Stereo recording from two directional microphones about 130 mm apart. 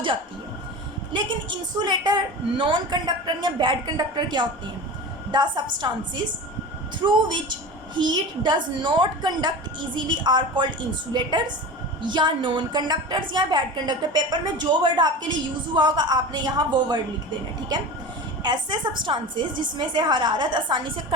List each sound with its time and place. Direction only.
1.8 s a woman's voice: 35° right (ahead or behind)
18.4 s a woman's voice: 35° right (ahead or behind)